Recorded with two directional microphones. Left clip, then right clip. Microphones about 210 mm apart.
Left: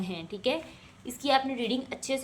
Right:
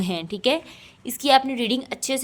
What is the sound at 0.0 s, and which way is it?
A woman's voice, 55° right (ahead or behind).